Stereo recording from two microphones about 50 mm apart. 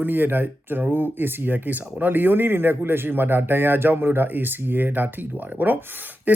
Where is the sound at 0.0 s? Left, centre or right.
Right.